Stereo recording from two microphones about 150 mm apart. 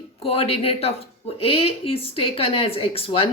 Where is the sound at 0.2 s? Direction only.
40° left (ahead or behind).